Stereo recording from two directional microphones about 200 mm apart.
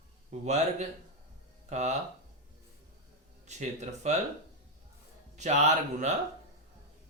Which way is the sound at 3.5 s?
35° right (ahead or behind).